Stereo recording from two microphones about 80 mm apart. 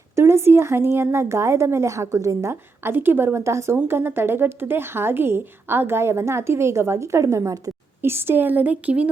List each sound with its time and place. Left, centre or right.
0.2 s speech: right
8.0 s a woman's voice: right